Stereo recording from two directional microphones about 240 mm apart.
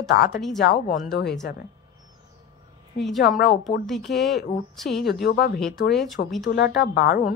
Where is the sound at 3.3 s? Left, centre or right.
Left.